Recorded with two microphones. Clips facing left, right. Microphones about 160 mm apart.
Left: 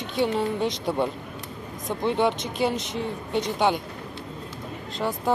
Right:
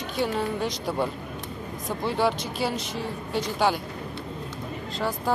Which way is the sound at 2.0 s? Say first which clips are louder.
Left 2 dB; 5° right (ahead or behind).